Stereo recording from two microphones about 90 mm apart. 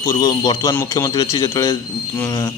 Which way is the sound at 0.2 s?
50° left (ahead or behind).